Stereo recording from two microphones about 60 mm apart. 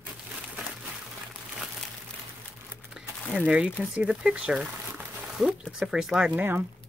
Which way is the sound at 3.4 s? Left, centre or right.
Centre.